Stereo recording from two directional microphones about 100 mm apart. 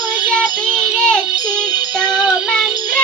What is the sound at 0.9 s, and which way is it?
Music, 15° right (ahead or behind).